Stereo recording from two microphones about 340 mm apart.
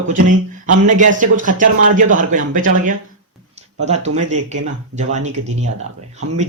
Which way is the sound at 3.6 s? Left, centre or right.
Centre.